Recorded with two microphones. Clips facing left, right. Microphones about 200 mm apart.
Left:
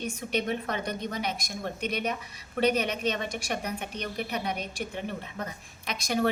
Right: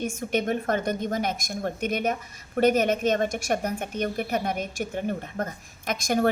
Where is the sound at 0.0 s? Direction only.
45° right (ahead or behind).